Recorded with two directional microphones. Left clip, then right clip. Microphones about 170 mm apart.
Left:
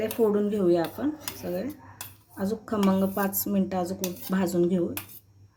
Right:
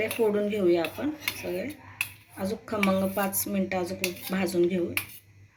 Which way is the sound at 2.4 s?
65° left (ahead or behind).